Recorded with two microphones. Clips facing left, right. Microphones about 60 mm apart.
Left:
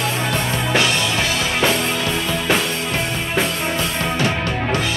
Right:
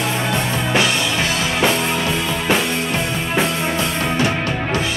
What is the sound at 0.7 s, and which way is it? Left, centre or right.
Music, centre.